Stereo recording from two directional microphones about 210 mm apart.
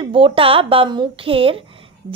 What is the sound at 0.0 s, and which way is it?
Speech, 25° right (ahead or behind).